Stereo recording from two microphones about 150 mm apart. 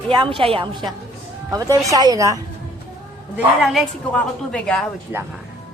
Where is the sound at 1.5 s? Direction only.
25° right (ahead or behind).